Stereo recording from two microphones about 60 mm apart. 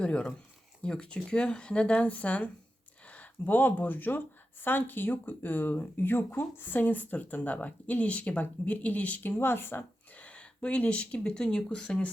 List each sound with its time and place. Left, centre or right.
0.0 s speech: centre; by 9.8 s left
10.2 s speech: left